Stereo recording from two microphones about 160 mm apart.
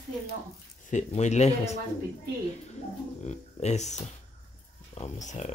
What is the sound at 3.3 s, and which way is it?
Speech, 45° left (ahead or behind).